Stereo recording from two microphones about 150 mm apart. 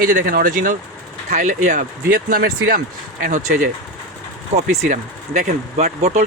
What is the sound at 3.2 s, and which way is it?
Speech, 60° right (ahead or behind).